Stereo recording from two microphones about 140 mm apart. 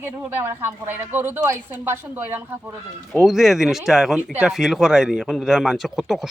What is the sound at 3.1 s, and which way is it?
Speech, 5° right (ahead or behind).